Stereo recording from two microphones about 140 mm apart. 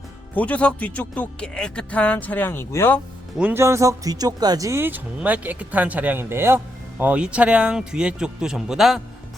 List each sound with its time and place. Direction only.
0.3 s speech: 10° left (ahead or behind)
3.3 s a man's voice: 15° right (ahead or behind)